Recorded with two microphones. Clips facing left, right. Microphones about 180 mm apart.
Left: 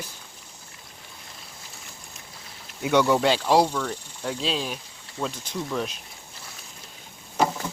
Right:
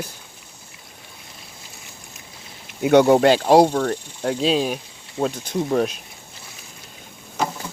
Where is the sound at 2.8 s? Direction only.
55° right (ahead or behind).